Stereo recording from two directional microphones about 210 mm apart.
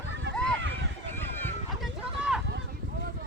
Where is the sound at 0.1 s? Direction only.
55° right (ahead or behind).